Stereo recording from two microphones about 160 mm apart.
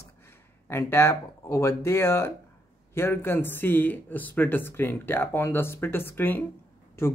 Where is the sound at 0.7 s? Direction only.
15° left (ahead or behind).